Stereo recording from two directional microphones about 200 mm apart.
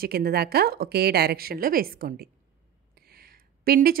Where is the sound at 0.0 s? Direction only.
50° right (ahead or behind).